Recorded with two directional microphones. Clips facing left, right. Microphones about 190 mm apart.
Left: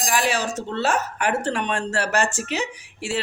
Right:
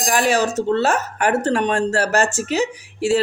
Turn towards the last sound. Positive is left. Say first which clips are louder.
# right 11 dB
turn(degrees=-40)  # may be behind; listen again after turning